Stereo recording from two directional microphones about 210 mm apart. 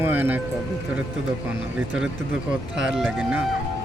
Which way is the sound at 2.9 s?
Centre (ahead or behind).